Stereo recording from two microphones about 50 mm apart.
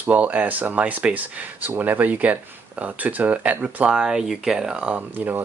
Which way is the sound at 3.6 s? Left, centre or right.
Centre.